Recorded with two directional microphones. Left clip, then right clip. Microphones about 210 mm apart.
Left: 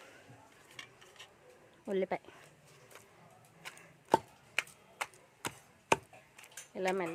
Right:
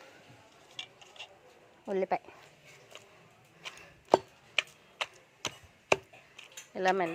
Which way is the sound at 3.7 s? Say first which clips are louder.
Right 4 dB; 5° left (ahead or behind).